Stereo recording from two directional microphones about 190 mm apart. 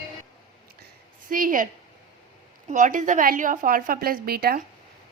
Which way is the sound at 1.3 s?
45° right (ahead or behind).